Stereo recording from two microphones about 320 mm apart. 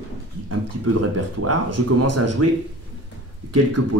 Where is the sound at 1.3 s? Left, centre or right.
Right.